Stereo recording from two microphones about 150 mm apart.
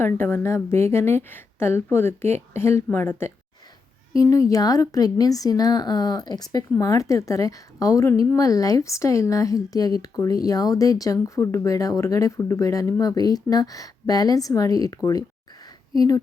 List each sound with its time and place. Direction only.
0.0 s a woman's voice: 15° left (ahead or behind)